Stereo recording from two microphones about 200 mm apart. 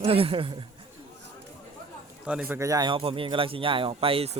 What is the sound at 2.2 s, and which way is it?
Speech, 5° right (ahead or behind).